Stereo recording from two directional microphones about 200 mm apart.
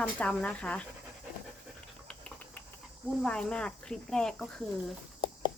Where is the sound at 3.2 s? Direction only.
5° left (ahead or behind).